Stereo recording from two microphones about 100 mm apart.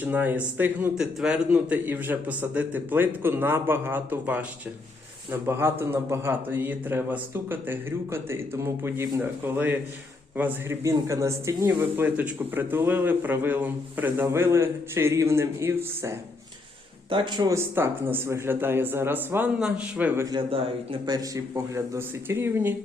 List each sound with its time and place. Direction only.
0.0 s a man's voice: 20° right (ahead or behind)
10.8 s a man's voice: 30° right (ahead or behind)
17.1 s speech: 50° right (ahead or behind)
17.5 s a man's voice: 25° right (ahead or behind)
19.5 s a man's voice: 10° right (ahead or behind)
21.1 s a man's voice: 35° right (ahead or behind)